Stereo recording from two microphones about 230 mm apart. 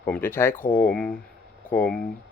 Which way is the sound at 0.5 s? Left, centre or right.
Left.